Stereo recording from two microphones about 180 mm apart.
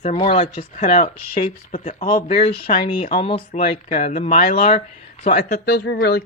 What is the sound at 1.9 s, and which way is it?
Speech, 55° left (ahead or behind).